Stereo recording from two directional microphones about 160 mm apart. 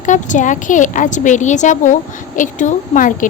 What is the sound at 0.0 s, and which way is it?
A woman's voice, 50° left (ahead or behind).